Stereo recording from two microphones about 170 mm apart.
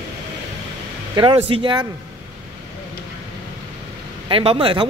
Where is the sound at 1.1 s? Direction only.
30° right (ahead or behind).